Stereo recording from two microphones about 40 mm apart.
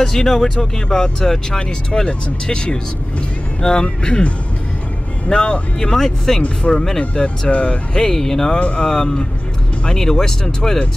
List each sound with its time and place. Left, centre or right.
0.0 s speech: centre
1.6 s speech: left
5.3 s speech: left
5.9 s speech: centre
7.0 s speech: left
7.9 s speech: centre
8.5 s speech: left
8.8 s speech: centre